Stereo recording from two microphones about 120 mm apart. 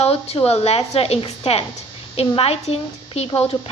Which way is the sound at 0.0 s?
60° left (ahead or behind).